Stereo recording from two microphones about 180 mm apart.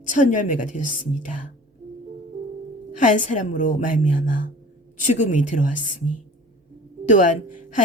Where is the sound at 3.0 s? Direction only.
45° left (ahead or behind).